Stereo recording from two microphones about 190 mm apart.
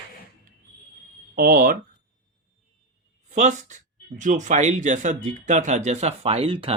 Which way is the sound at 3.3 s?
40° right (ahead or behind).